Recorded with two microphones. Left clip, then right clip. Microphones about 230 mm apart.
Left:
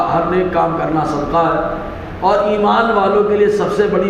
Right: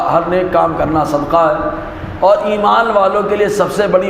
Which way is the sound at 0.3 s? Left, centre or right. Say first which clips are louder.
Right 2 dB; right.